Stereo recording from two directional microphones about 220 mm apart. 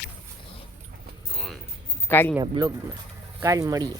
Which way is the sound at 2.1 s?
10° left (ahead or behind).